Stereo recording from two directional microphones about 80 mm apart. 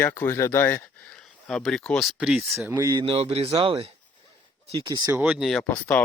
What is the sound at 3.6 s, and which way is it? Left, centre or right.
Speech, right.